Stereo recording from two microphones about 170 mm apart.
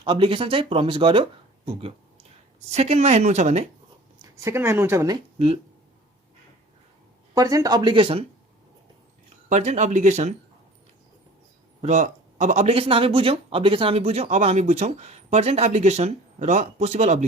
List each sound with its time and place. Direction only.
0.0 s speech: 30° right (ahead or behind)
2.7 s speech: 40° right (ahead or behind)
4.2 s speech: 15° right (ahead or behind)
5.1 s speech: 35° right (ahead or behind)
7.3 s speech: 20° right (ahead or behind)
9.5 s speech: 40° right (ahead or behind)
11.8 s speech: 40° right (ahead or behind)